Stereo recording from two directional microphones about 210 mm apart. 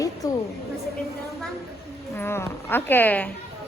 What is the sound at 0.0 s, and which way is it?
Music, 15° left (ahead or behind).